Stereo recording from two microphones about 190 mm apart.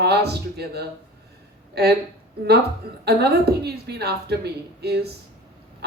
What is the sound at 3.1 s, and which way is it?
Speech, 55° right (ahead or behind).